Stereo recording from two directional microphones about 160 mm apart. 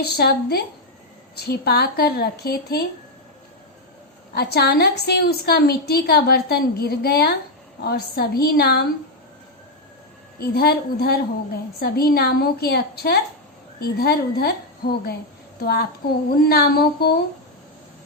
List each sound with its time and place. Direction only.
0.0 s a woman's voice: 85° left
4.4 s a woman's voice: 85° left
10.4 s a woman's voice: 80° left